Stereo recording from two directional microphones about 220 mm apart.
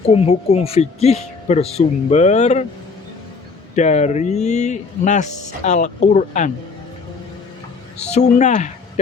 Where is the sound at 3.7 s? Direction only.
30° left (ahead or behind).